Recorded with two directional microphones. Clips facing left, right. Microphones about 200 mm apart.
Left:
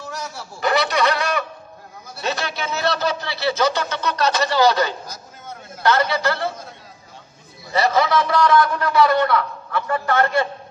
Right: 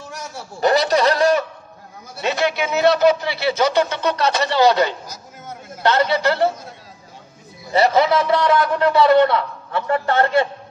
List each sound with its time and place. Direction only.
0.6 s a sound: 40° right (ahead or behind)
2.1 s a man's voice: 20° right (ahead or behind)
7.7 s a man's voice: 25° right (ahead or behind)